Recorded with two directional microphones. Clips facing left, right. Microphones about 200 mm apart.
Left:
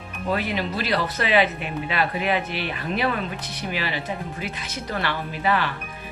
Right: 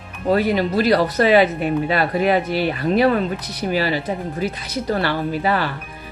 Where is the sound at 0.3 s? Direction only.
40° right (ahead or behind).